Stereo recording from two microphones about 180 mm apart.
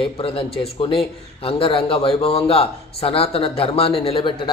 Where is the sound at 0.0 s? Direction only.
30° left (ahead or behind).